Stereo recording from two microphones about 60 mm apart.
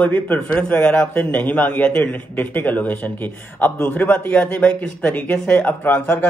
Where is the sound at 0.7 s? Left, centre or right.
Centre.